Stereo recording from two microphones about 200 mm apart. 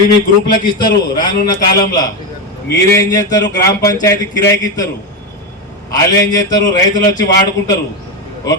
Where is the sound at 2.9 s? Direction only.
20° left (ahead or behind).